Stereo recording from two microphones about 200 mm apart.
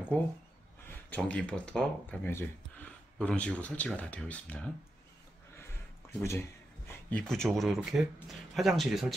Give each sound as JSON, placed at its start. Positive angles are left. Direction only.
{"t": 0.1, "sound": "speech", "side_deg": 5}
{"t": 6.1, "sound": "speech", "side_deg": 15}